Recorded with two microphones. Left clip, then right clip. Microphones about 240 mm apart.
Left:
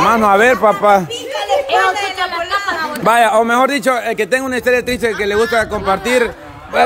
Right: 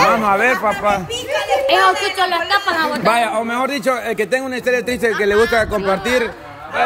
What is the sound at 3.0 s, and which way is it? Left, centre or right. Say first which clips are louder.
A man's voice: left 9 dB; centre.